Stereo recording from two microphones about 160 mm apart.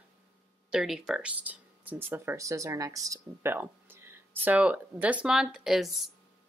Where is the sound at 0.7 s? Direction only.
5° right (ahead or behind).